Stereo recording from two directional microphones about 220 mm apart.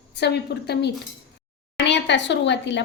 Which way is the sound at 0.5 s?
50° left (ahead or behind).